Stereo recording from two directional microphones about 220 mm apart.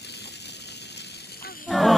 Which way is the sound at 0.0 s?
50° left (ahead or behind).